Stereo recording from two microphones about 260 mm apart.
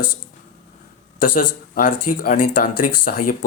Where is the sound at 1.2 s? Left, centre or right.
Left.